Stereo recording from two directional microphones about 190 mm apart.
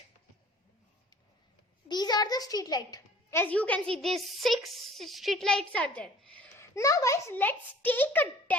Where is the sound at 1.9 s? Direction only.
20° left (ahead or behind).